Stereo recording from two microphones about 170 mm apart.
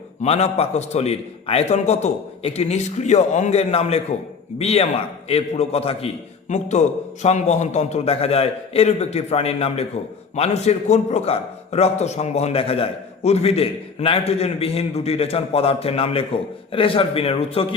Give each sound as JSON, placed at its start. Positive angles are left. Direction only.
{"t": 0.2, "sound": "a man's voice", "side_deg": 40}